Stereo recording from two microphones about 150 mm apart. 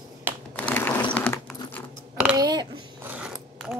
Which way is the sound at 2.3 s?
30° right (ahead or behind).